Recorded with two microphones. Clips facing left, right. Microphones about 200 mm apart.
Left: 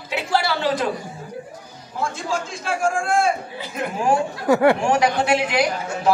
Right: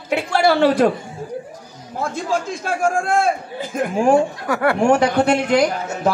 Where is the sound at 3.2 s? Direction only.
50° right (ahead or behind).